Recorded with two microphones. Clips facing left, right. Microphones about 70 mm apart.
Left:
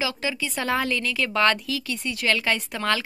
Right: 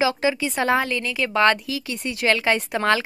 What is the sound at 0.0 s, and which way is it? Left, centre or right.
A woman's voice, right.